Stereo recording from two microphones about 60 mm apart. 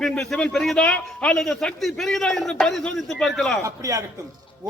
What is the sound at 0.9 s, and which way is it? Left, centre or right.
Speech, left.